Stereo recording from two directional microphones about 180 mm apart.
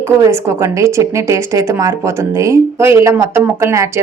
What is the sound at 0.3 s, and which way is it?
Speech, 15° right (ahead or behind).